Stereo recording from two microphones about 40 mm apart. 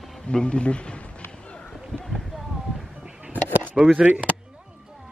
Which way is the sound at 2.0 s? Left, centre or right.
Centre.